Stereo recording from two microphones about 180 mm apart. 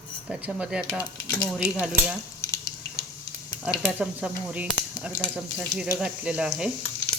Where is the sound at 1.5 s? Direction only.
5° right (ahead or behind).